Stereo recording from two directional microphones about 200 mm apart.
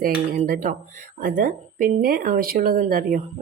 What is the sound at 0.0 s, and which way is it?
Speech, 45° right (ahead or behind).